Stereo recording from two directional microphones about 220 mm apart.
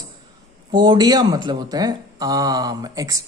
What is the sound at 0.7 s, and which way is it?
Speech, 20° right (ahead or behind).